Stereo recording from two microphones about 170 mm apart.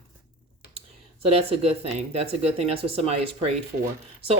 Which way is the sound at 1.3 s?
35° right (ahead or behind).